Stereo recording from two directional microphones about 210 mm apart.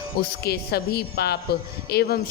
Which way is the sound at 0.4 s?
50° left (ahead or behind).